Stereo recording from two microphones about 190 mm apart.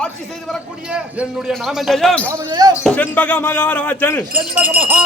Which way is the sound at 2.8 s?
10° left (ahead or behind).